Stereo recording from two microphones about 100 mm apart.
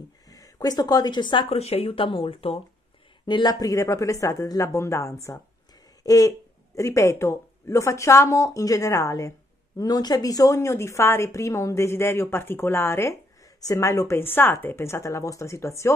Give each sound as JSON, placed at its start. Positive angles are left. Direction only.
{"t": 0.3, "sound": "speech", "side_deg": 40}
{"t": 1.5, "sound": "speech", "side_deg": 90}
{"t": 2.0, "sound": "speech", "side_deg": 60}
{"t": 3.3, "sound": "a woman's voice", "side_deg": 45}